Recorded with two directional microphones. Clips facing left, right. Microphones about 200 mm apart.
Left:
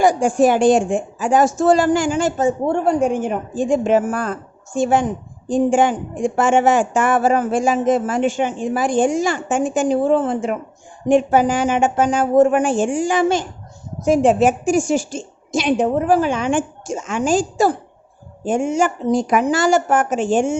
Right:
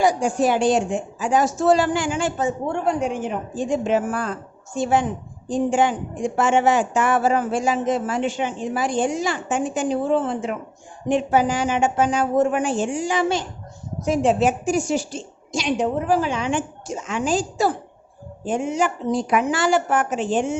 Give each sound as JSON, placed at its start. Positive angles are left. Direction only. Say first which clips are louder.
{"t": 0.0, "sound": "a woman's voice", "louder": "left 5 dB", "side_deg": 50}